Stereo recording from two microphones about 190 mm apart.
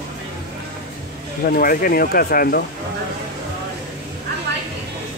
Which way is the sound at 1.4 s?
50° left (ahead or behind).